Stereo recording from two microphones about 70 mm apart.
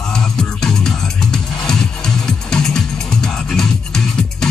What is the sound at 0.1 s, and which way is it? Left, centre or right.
Music, centre.